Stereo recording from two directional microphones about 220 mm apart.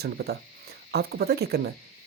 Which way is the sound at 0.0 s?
45° right (ahead or behind).